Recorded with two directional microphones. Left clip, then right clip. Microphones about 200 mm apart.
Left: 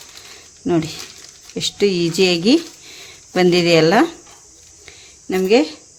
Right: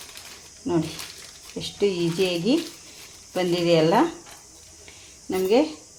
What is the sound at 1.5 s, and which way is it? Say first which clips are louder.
Speech: left 7 dB; 40° left (ahead or behind).